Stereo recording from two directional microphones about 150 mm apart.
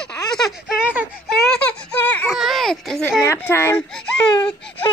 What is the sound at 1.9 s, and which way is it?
Baby cry, 10° left (ahead or behind).